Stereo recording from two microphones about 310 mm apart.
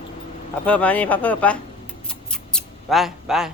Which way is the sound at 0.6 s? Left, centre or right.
Centre.